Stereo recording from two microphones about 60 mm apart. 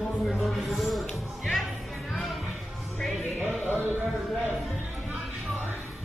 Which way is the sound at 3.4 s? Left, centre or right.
Right.